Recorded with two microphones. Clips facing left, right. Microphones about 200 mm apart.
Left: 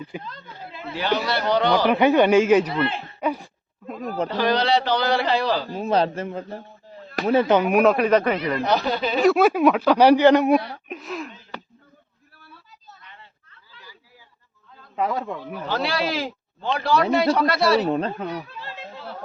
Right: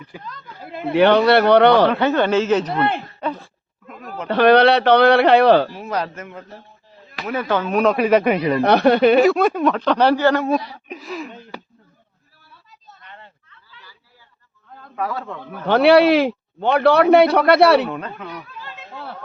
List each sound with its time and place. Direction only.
0.0 s a man's voice: 25° left (ahead or behind)
0.6 s a man's voice: 55° right (ahead or behind)
1.9 s speech: 15° left (ahead or behind)
3.8 s a sound: 35° left (ahead or behind)
4.3 s a man's voice: 65° right (ahead or behind)
5.7 s a man's voice: 30° left (ahead or behind); by 7.9 s 10° left (ahead or behind)
7.9 s speech: 5° right (ahead or behind)
8.6 s a man's voice: 65° right (ahead or behind)
9.2 s speech: 5° left (ahead or behind)
10.8 s speech: centre (ahead or behind)
13.1 s a sound: 50° right (ahead or behind)
14.9 s speech: 15° left (ahead or behind)
15.6 s a man's voice: 65° right (ahead or behind)
17.8 s speech: 30° left (ahead or behind)